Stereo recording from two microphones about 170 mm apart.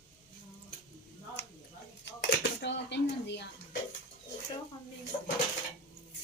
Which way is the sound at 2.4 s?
85° left.